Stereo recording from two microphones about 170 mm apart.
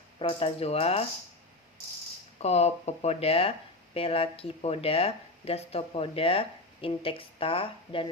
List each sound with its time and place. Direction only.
0.2 s speech: 30° left (ahead or behind)
2.4 s speech: 40° left (ahead or behind)